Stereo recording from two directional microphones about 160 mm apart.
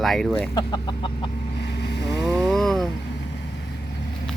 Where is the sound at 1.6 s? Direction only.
90° left.